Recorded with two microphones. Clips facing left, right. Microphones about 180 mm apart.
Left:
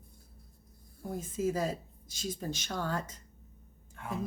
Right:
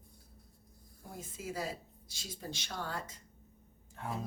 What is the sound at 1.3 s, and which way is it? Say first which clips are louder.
Speech: left 8 dB; 45° left (ahead or behind).